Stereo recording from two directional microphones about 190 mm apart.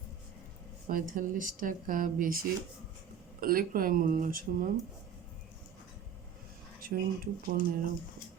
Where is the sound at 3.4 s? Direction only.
50° right (ahead or behind).